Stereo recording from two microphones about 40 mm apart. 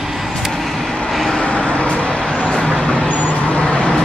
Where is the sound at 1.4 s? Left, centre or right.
Left.